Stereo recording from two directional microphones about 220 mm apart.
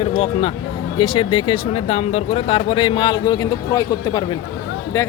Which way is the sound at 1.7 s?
30° left (ahead or behind).